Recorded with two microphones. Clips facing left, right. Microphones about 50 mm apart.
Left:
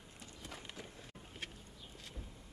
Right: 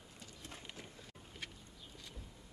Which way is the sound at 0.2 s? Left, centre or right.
Left.